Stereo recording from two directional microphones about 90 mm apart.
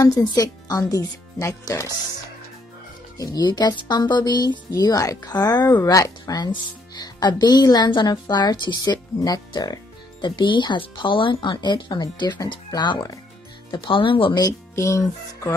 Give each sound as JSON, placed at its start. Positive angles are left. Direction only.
{"t": 0.0, "sound": "speech", "side_deg": 45}
{"t": 3.2, "sound": "speech", "side_deg": 45}
{"t": 13.7, "sound": "speech", "side_deg": 70}
{"t": 14.3, "sound": "speech", "side_deg": 40}